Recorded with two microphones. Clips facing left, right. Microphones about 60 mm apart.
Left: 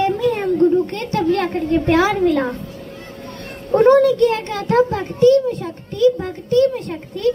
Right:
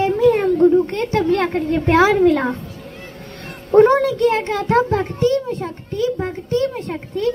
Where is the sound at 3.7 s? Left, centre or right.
Centre.